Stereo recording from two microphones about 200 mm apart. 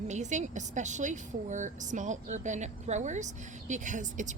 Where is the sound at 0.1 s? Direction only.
35° right (ahead or behind).